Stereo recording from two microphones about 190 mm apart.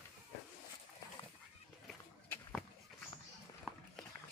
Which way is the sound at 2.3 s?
5° left (ahead or behind).